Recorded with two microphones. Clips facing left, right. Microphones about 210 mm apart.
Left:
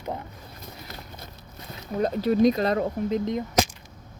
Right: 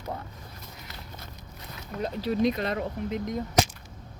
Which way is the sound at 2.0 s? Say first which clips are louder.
Left 6 dB; 45° left (ahead or behind).